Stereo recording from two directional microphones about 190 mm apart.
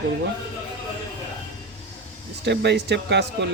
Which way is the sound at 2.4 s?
65° right (ahead or behind).